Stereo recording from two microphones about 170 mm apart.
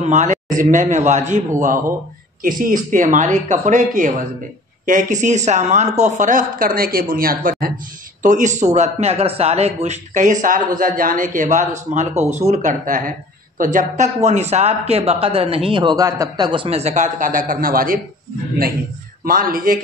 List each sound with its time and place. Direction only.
0.0 s speech: 45° right (ahead or behind)
2.6 s speech: 50° right (ahead or behind)
19.2 s speech: 55° right (ahead or behind)